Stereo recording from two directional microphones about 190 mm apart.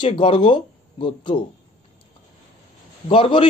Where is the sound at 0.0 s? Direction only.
30° left (ahead or behind).